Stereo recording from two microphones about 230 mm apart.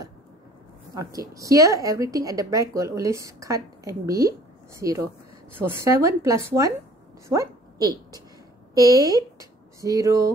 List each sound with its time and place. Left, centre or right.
0.9 s a woman's voice: centre